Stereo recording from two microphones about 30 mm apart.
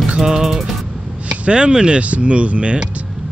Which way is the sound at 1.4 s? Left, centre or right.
Right.